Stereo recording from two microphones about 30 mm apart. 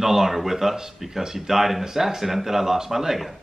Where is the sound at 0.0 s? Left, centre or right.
Centre.